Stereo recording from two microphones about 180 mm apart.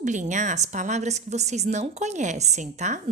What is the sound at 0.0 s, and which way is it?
A woman's voice, 40° right (ahead or behind).